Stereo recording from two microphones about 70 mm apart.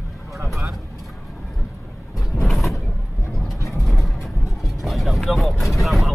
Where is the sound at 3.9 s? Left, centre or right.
Centre.